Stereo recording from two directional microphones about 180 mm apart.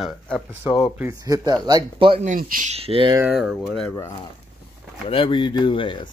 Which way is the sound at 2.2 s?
45° right (ahead or behind).